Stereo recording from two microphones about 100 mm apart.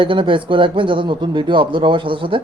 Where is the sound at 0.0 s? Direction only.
55° right (ahead or behind).